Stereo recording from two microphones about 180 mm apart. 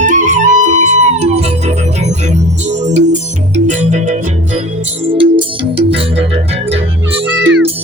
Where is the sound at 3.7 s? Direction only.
45° right (ahead or behind).